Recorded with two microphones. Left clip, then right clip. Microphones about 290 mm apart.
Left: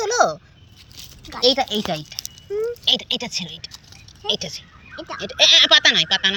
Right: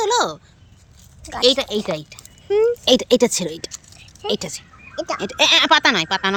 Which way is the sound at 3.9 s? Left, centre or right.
Centre.